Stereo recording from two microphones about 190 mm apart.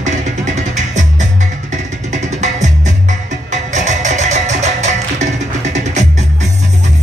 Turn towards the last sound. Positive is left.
turn(degrees=-40)  # may be behind; listen again after turning